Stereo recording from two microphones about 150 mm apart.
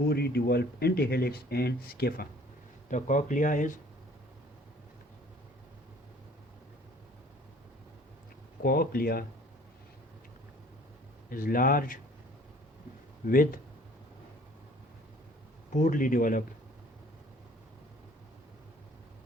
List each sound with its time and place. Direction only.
0.0 s speech: 90° left
2.9 s speech: 55° left (ahead or behind)
8.6 s speech: 90° left
11.3 s speech: 70° left (ahead or behind)
13.2 s speech: 70° left (ahead or behind)
15.7 s speech: 60° left (ahead or behind)